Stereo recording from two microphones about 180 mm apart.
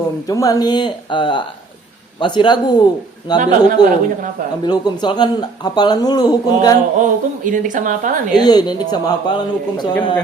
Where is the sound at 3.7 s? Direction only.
50° right (ahead or behind).